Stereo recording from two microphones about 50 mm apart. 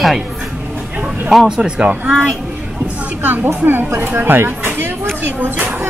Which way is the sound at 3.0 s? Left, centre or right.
Right.